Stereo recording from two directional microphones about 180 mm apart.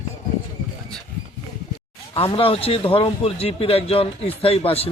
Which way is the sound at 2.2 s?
30° left (ahead or behind).